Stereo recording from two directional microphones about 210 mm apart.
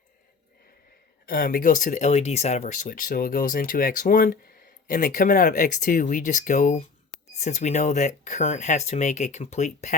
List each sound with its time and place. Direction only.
1.3 s speech: 45° left (ahead or behind)